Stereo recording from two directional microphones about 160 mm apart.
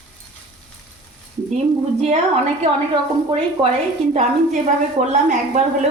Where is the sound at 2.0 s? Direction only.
45° right (ahead or behind).